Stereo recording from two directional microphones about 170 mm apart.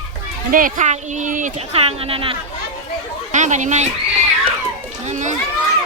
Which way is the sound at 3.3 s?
45° right (ahead or behind).